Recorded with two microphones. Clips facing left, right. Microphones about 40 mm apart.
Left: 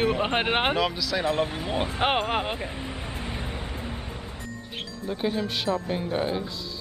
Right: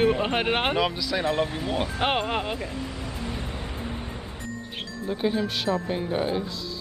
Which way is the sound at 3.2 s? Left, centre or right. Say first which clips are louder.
Right 1 dB; centre.